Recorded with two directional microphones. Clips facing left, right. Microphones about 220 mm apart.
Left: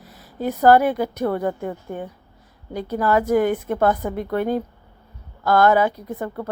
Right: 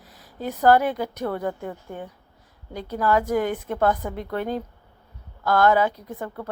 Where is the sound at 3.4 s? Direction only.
50° left (ahead or behind).